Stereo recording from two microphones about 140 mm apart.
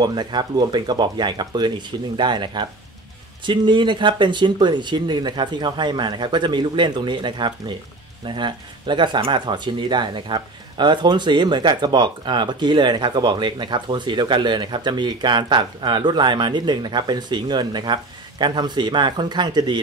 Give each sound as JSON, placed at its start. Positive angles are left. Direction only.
{"t": 0.0, "sound": "speech", "side_deg": -30}